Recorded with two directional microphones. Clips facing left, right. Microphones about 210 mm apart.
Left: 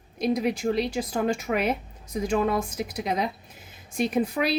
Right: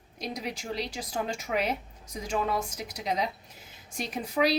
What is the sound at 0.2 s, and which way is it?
A woman's voice, 55° left (ahead or behind).